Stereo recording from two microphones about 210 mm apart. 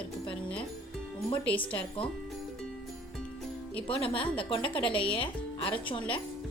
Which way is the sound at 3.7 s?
25° left (ahead or behind).